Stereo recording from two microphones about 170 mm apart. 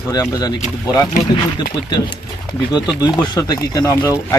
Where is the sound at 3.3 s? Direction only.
20° left (ahead or behind).